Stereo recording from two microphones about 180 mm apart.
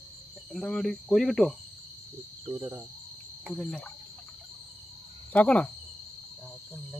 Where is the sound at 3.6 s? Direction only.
5° left (ahead or behind).